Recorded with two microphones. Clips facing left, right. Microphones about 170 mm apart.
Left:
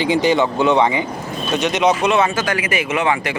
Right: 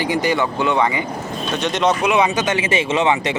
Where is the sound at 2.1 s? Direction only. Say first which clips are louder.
Even; 15° right (ahead or behind).